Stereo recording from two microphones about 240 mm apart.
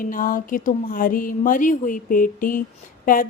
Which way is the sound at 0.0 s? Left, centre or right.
Left.